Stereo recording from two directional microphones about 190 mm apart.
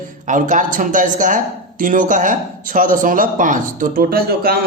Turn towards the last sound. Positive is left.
turn(degrees=-55)  # may be behind; listen again after turning